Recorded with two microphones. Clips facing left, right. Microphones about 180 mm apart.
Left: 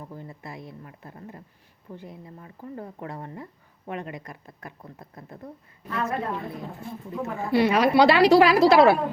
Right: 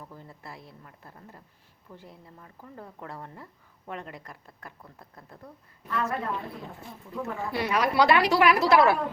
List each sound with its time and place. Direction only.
0.4 s a woman's voice: 20° left (ahead or behind)